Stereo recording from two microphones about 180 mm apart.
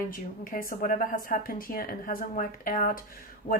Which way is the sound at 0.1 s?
50° left (ahead or behind).